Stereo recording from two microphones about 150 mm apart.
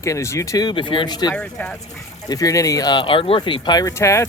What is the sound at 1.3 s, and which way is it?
Speech, 10° left (ahead or behind).